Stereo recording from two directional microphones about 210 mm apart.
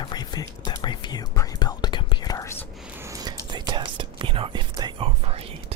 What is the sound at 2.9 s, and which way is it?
Whispering, 15° right (ahead or behind).